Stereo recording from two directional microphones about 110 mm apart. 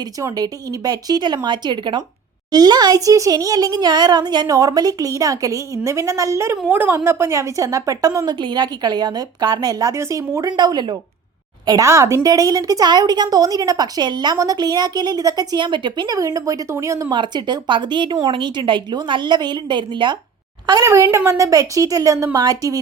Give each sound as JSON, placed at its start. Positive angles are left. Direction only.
{"t": 0.2, "sound": "a woman's voice", "side_deg": -35}
{"t": 16.1, "sound": "a woman's voice", "side_deg": -30}
{"t": 17.2, "sound": "a woman's voice", "side_deg": -40}
{"t": 20.8, "sound": "a woman's voice", "side_deg": -25}